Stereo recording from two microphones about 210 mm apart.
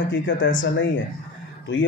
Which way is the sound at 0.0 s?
60° left (ahead or behind).